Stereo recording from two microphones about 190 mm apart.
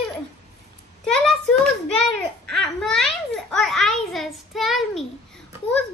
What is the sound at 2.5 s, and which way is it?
A child's voice, centre (ahead or behind).